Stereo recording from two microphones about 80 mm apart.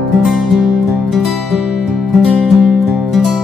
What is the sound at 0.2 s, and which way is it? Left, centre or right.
Music, centre.